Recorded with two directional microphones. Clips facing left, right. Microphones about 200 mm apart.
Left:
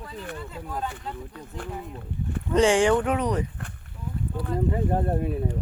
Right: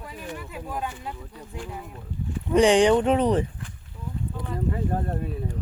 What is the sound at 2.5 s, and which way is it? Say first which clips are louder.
Speech: right 2 dB; 15° right (ahead or behind).